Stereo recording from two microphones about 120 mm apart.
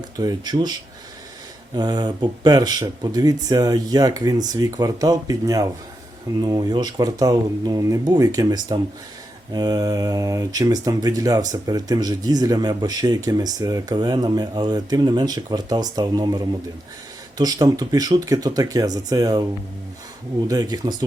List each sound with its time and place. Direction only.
0.2 s speech: 35° right (ahead or behind)
1.7 s speech: 35° right (ahead or behind)
20.5 s speech: 35° right (ahead or behind)